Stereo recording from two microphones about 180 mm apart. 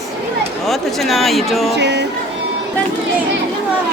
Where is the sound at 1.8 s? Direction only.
70° right (ahead or behind).